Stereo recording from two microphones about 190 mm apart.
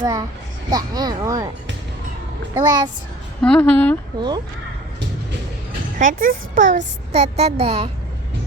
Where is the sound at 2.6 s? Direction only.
25° right (ahead or behind).